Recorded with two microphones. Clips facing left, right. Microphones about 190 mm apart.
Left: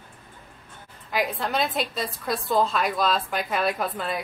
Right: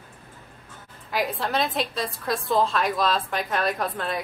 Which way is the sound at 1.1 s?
Centre (ahead or behind).